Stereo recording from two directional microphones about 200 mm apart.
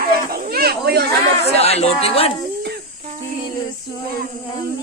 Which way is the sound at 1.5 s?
30° left (ahead or behind).